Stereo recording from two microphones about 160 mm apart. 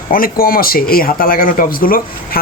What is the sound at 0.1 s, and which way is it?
Speech, 65° left (ahead or behind).